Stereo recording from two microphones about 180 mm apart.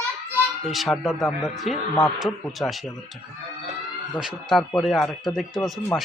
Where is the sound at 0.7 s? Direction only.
Centre (ahead or behind).